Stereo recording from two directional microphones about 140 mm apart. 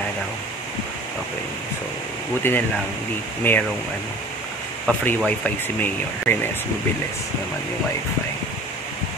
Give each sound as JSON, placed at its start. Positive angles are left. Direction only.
{"t": 2.4, "sound": "speech", "side_deg": 15}
{"t": 4.8, "sound": "speech", "side_deg": 5}